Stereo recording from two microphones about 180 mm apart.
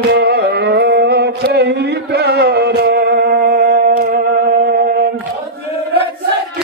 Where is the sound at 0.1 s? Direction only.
65° right (ahead or behind).